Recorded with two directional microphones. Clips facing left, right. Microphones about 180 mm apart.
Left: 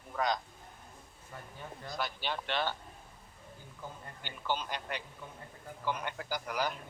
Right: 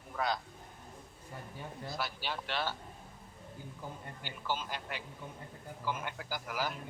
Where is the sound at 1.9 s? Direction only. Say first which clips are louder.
Left 3 dB; 5° right (ahead or behind).